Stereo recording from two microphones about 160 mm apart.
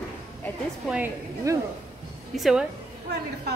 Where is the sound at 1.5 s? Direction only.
20° right (ahead or behind).